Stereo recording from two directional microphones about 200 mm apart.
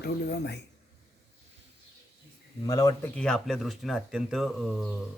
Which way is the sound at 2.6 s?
15° left (ahead or behind).